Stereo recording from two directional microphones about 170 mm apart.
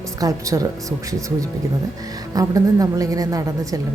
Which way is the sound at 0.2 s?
20° right (ahead or behind).